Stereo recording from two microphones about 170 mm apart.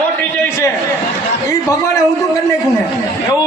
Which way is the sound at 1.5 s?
20° left (ahead or behind).